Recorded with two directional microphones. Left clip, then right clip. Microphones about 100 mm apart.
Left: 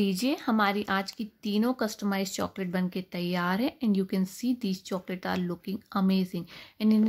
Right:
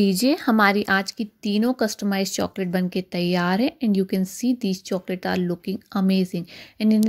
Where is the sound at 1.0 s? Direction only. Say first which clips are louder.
Right 6 dB; 40° right (ahead or behind).